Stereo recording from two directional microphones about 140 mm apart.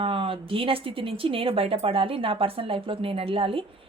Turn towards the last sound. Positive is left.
turn(degrees=-40)  # may be behind; listen again after turning